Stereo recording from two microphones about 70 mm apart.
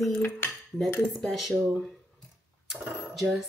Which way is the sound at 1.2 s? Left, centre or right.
Centre.